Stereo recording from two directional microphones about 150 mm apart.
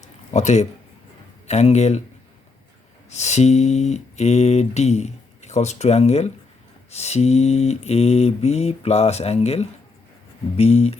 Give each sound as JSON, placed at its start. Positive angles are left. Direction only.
{"t": 0.0, "sound": "a sound", "side_deg": 50}
{"t": 1.5, "sound": "speech", "side_deg": 50}
{"t": 3.1, "sound": "speech", "side_deg": 50}